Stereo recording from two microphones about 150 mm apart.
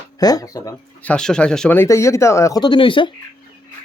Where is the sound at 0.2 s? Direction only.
25° left (ahead or behind).